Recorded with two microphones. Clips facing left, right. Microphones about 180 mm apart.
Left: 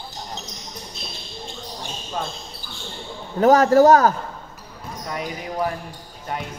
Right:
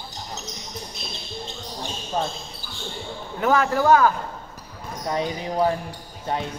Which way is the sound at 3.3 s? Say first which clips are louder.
Left 7 dB; 40° left (ahead or behind).